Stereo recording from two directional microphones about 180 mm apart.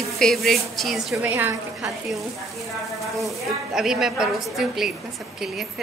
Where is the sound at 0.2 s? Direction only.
Centre (ahead or behind).